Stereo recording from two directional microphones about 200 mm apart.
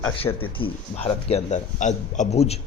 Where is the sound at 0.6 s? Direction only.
30° left (ahead or behind).